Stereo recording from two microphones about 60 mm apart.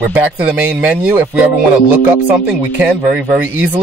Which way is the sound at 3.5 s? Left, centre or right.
Right.